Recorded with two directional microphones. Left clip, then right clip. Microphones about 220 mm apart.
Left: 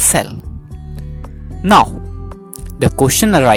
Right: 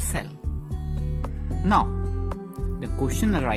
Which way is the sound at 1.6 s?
50° left (ahead or behind).